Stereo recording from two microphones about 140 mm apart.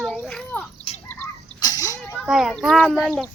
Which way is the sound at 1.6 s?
25° left (ahead or behind).